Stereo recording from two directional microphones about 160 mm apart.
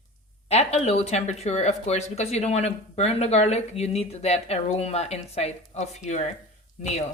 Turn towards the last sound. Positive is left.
turn(degrees=45)  # may be behind; listen again after turning